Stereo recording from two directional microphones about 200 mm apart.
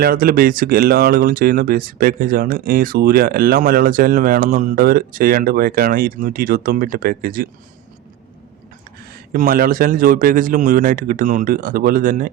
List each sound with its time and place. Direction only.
0.0 s speech: 45° right (ahead or behind)
9.3 s speech: 45° right (ahead or behind)